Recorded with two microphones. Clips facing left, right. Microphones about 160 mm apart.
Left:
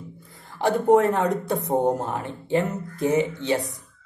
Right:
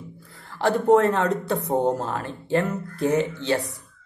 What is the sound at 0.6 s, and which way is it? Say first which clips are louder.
A man's voice: even; 20° left (ahead or behind).